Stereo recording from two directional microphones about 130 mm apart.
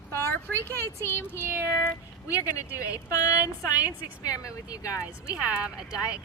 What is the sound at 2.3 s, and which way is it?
Speech, 25° left (ahead or behind).